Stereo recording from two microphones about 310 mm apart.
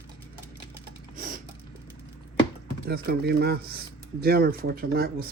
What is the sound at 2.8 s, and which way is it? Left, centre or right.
Speech, right.